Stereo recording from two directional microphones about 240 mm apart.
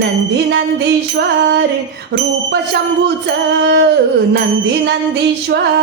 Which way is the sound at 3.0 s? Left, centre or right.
Right.